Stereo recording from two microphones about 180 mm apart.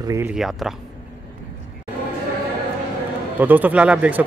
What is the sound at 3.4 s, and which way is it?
Speech, 10° right (ahead or behind).